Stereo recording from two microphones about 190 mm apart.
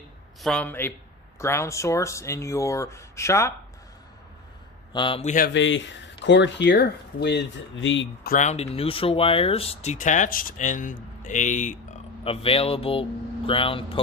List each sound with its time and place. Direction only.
0.4 s speech: 5° left (ahead or behind)
4.9 s speech: 25° left (ahead or behind)
5.5 s speech: 75° left (ahead or behind)
8.3 s speech: 40° left (ahead or behind)
12.2 s speech: 30° left (ahead or behind)